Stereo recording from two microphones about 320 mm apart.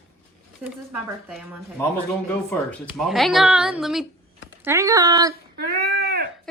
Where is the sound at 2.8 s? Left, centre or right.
Centre.